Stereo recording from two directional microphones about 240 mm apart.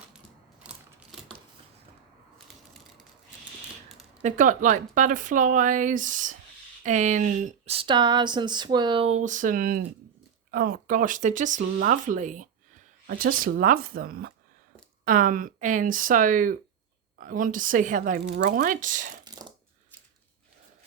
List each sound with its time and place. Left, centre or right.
0.6 s mechanisms: centre
4.2 s speech: right
19.2 s a sound: centre